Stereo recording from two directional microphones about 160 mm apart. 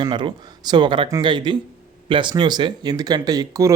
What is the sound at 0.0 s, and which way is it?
Speech, 30° right (ahead or behind).